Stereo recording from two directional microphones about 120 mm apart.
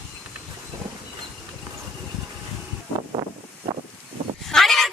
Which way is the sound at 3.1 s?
45° right (ahead or behind).